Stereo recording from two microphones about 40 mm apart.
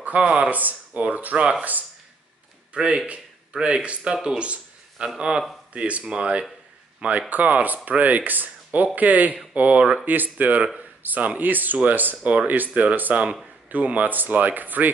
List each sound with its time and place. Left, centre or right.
0.0 s a sound: right
0.4 s speech: right
0.9 s speech: right
1.6 s speech: right
2.7 s speech: right
5.7 s speech: right
7.0 s speech: right
10.0 s speech: right
12.2 s speech: right